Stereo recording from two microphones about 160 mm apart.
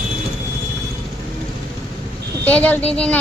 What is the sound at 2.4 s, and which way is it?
Speech, 10° left (ahead or behind).